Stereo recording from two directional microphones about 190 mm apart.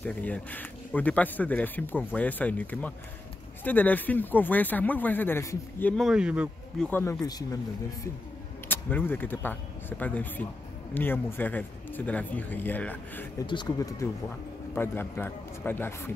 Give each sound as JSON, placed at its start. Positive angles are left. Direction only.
{"t": 0.0, "sound": "speech", "side_deg": 5}
{"t": 6.9, "sound": "speech", "side_deg": 15}
{"t": 8.6, "sound": "speech", "side_deg": 10}
{"t": 13.5, "sound": "speech", "side_deg": 20}